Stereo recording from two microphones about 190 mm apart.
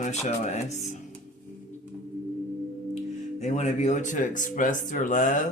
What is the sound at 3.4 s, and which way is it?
Speech, 35° left (ahead or behind).